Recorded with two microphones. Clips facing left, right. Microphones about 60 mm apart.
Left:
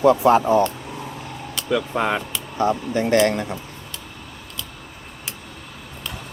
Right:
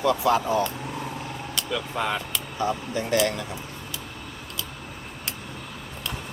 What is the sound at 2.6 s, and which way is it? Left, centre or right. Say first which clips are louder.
Speech: left 7 dB; left.